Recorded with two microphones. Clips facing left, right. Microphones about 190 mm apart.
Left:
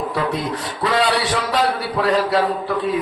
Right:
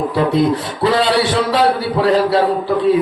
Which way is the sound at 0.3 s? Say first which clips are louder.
Right 9 dB; 25° right (ahead or behind).